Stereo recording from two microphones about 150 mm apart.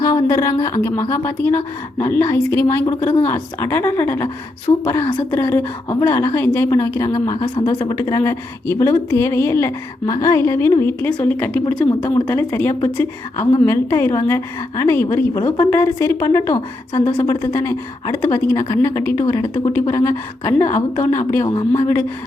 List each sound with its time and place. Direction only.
0.3 s a woman's voice: 20° left (ahead or behind)
2.8 s a woman's voice: 30° left (ahead or behind)
3.2 s a woman's voice: 15° left (ahead or behind)
7.3 s a woman's voice: 35° left (ahead or behind); by 11.6 s 10° left (ahead or behind)
11.9 s a woman's voice: 30° left (ahead or behind)
12.3 s a woman's voice: 15° left (ahead or behind)